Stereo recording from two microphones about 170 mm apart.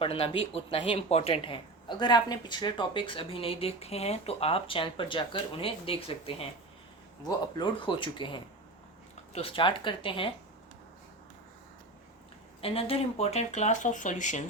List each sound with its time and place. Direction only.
0.0 s speech: 35° left (ahead or behind)
12.6 s speech: 35° left (ahead or behind)